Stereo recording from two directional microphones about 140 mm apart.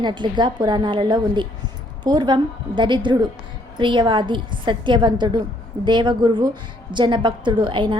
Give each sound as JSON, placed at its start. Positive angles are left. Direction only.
{"t": 0.0, "sound": "a woman's voice", "side_deg": -35}